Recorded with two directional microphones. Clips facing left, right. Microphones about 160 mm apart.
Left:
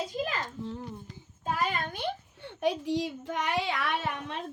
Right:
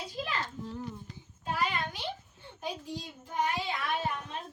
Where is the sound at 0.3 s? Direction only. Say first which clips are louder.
Left 1 dB; 45° left (ahead or behind).